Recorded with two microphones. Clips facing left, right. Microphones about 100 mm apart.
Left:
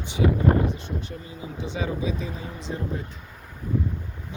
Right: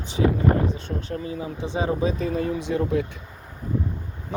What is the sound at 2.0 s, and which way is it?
Speech, 45° right (ahead or behind).